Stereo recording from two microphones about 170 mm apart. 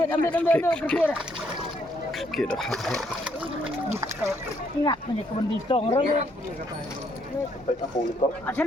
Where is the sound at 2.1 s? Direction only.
Centre (ahead or behind).